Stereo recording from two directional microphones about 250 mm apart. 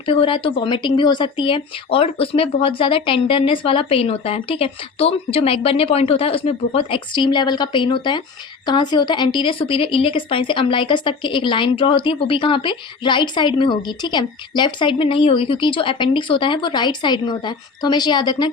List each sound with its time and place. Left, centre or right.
0.1 s speech: left